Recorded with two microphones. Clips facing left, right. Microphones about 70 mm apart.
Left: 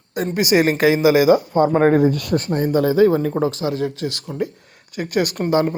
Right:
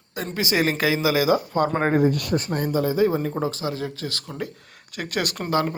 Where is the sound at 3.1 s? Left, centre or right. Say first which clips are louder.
Left 6 dB; left.